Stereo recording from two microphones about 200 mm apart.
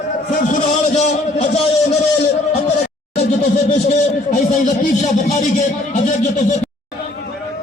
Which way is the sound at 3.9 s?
35° left (ahead or behind).